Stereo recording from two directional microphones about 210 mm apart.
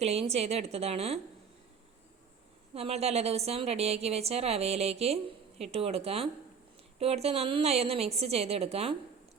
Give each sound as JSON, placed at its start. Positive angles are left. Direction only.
{"t": 0.0, "sound": "a woman's voice", "side_deg": -30}
{"t": 2.7, "sound": "a woman's voice", "side_deg": -30}